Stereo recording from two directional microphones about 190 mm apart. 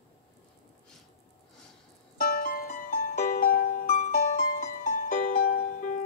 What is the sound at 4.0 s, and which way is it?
Music, 40° left (ahead or behind).